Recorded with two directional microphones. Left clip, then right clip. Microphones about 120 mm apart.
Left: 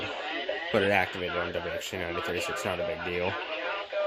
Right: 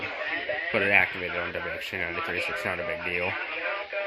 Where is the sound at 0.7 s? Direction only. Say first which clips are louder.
Right 3 dB; 35° left (ahead or behind).